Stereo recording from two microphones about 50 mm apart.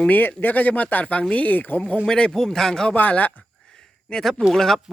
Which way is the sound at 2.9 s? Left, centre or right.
Left.